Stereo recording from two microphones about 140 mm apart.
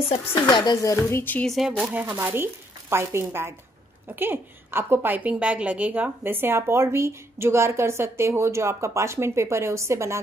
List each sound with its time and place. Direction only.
0.5 s speech: 30° left (ahead or behind); by 1.5 s 15° left (ahead or behind)
1.8 s a woman's voice: 10° right (ahead or behind)